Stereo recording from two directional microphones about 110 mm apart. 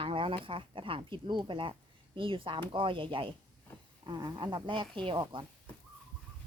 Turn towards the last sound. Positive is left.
turn(degrees=-50)  # may be behind; listen again after turning